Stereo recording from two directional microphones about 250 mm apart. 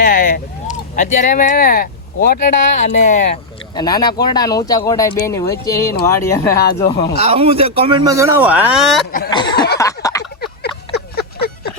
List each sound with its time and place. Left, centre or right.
0.0 s speech: left
3.8 s speech: centre
7.2 s speech: right; by 9.0 s centre
9.3 s speech: centre
10.4 s a sound: left